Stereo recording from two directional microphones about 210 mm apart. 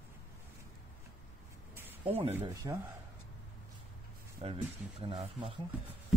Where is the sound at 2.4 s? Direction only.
15° right (ahead or behind).